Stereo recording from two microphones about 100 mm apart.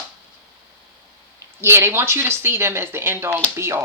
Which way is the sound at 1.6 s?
25° right (ahead or behind).